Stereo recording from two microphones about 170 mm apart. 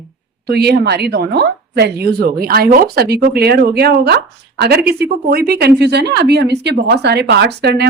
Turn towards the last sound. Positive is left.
turn(degrees=-75)  # may be behind; listen again after turning